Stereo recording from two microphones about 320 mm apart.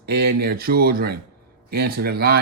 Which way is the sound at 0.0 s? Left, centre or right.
Right.